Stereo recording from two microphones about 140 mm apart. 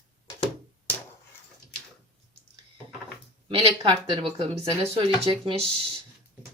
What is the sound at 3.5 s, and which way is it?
Speech, 40° right (ahead or behind).